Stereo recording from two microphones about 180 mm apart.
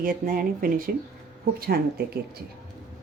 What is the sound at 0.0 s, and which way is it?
Speech, 50° right (ahead or behind).